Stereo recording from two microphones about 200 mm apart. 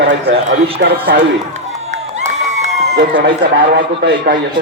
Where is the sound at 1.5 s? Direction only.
35° right (ahead or behind).